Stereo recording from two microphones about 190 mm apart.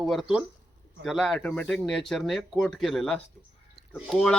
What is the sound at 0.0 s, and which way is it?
Speech, centre (ahead or behind).